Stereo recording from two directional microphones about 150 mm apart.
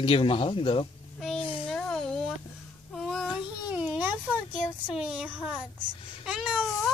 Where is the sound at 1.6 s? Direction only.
5° left (ahead or behind).